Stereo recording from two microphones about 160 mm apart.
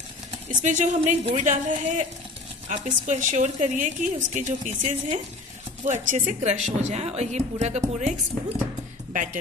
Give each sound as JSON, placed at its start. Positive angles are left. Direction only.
{"t": 0.5, "sound": "a woman's voice", "side_deg": -50}
{"t": 9.1, "sound": "speech", "side_deg": -55}